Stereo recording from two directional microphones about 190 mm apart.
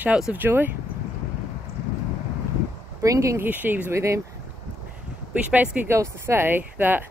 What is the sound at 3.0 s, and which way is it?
Speech, 15° right (ahead or behind).